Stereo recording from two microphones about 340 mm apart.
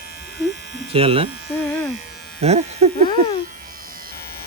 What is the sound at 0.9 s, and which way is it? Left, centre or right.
Speech, centre.